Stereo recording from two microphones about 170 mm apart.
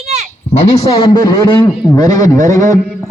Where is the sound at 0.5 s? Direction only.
40° left (ahead or behind).